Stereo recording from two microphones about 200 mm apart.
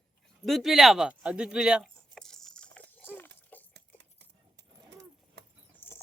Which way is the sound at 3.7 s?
60° right (ahead or behind).